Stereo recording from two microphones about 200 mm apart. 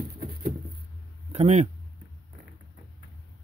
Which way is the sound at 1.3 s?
35° right (ahead or behind).